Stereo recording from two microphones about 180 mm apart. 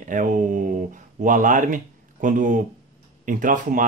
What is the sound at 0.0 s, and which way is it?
Speech, 45° right (ahead or behind).